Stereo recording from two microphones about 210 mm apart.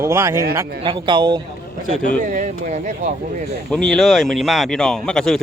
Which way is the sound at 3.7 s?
5° left (ahead or behind).